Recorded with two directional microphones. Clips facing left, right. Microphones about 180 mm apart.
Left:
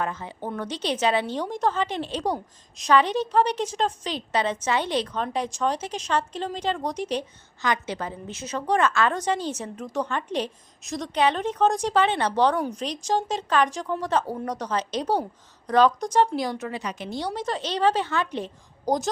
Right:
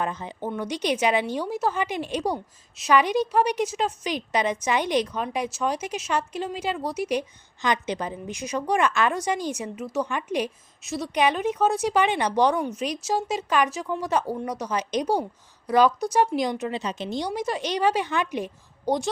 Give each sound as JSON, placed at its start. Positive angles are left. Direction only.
{"t": 0.0, "sound": "a woman's voice", "side_deg": -20}